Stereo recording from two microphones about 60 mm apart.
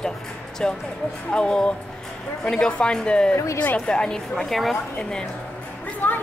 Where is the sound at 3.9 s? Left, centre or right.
Centre.